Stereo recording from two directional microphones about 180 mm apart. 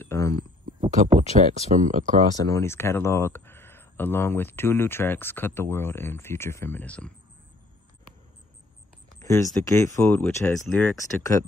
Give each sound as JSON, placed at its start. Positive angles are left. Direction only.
{"t": 0.0, "sound": "a sound", "side_deg": 15}
{"t": 0.8, "sound": "speech", "side_deg": -40}
{"t": 2.4, "sound": "speech", "side_deg": 15}
{"t": 9.2, "sound": "speech", "side_deg": 15}